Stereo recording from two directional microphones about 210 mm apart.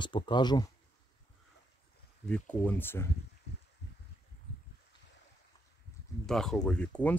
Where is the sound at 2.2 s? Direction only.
5° left (ahead or behind).